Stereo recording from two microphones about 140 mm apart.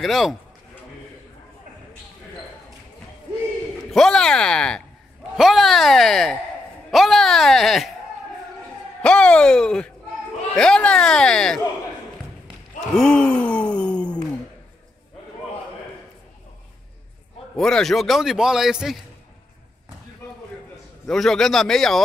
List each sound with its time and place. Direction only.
0.0 s a man's voice: centre (ahead or behind)
3.9 s a man's voice: 5° left (ahead or behind)
9.0 s a man's voice: 10° left (ahead or behind)
12.9 s a sound: 5° left (ahead or behind)
17.6 s a man's voice: 5° left (ahead or behind)
21.1 s a man's voice: 5° left (ahead or behind)